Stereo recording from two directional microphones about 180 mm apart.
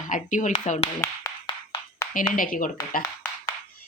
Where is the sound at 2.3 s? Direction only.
50° left (ahead or behind).